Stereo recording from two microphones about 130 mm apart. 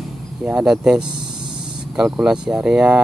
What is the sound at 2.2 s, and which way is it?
Speech, 10° right (ahead or behind).